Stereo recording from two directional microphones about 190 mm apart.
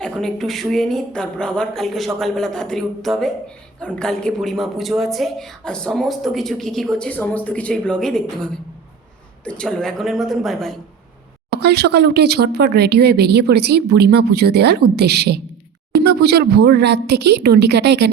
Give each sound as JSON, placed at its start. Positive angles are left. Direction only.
{"t": 0.0, "sound": "a woman's voice", "side_deg": 0}
{"t": 11.5, "sound": "speech", "side_deg": -60}